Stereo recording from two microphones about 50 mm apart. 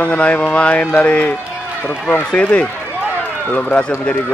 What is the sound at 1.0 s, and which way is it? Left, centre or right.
A man's voice, left.